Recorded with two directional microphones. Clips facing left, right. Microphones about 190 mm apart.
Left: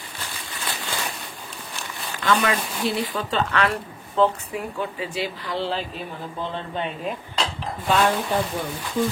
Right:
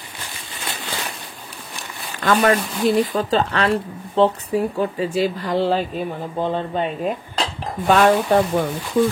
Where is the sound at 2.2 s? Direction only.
45° right (ahead or behind).